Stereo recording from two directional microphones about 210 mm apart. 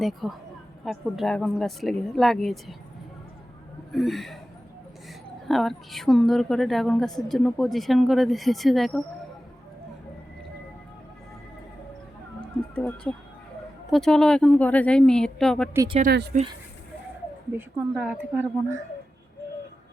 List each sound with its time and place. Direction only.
0.0 s a woman's voice: centre (ahead or behind)
3.9 s a woman's voice: centre (ahead or behind)
5.5 s a woman's voice: centre (ahead or behind)
12.4 s music: 5° left (ahead or behind)
13.9 s a woman's voice: 5° left (ahead or behind)
15.7 s a woman's voice: 15° right (ahead or behind)
16.3 s speech: 40° right (ahead or behind)
17.5 s a woman's voice: 10° right (ahead or behind)